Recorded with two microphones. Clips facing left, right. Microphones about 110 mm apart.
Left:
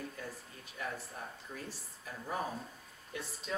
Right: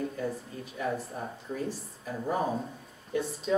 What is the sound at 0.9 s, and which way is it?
Speech, 30° right (ahead or behind).